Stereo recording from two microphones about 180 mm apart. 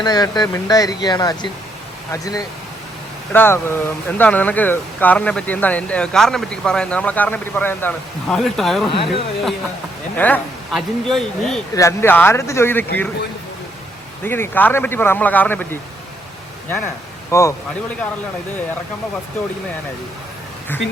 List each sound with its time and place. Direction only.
0.0 s speech: 20° left (ahead or behind); by 8.8 s centre (ahead or behind)
8.9 s speech: 30° left (ahead or behind)
10.2 s speech: 10° left (ahead or behind)
11.7 s speech: 15° left (ahead or behind)
14.3 s speech: 10° left (ahead or behind)
17.3 s speech: 15° left (ahead or behind)